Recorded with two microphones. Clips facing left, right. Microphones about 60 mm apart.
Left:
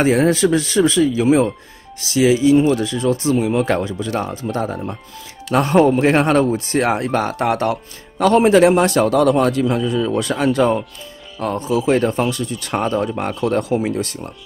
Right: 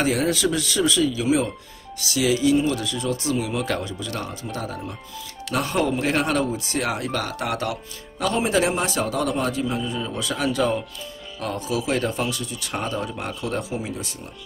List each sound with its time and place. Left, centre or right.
0.0 s speech: left
10.2 s speech: left